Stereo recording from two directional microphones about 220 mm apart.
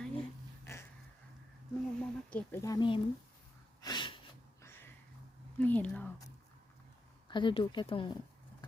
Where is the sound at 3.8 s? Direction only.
20° left (ahead or behind).